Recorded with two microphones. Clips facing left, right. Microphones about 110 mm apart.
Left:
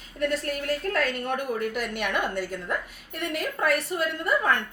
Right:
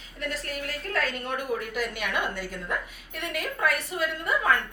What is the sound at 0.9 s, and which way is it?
A woman's voice, 45° left (ahead or behind).